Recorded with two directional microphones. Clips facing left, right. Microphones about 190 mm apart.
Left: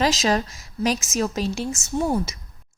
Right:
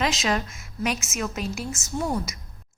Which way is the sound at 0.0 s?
35° left (ahead or behind).